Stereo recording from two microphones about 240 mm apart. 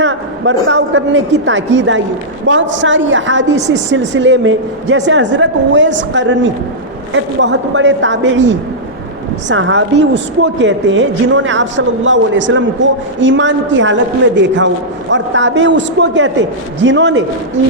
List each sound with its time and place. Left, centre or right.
0.0 s a man's voice: right